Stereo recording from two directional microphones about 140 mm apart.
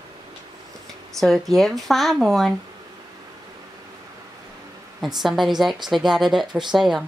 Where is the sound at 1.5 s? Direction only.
Centre (ahead or behind).